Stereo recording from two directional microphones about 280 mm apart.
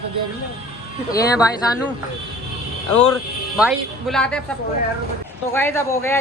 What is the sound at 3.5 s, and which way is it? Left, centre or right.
Speech, centre.